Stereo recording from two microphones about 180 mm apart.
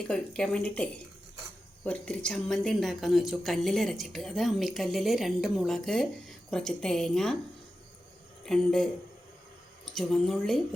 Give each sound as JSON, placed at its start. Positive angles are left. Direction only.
{"t": 0.1, "sound": "speech", "side_deg": 5}
{"t": 8.4, "sound": "speech", "side_deg": 0}